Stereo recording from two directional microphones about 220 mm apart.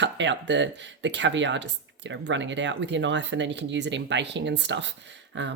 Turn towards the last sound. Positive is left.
turn(degrees=-55)  # may be behind; listen again after turning